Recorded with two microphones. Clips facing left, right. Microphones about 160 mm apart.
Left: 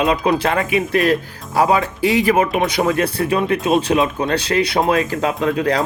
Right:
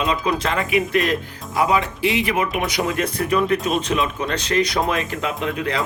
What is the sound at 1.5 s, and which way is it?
Speech, 35° left (ahead or behind).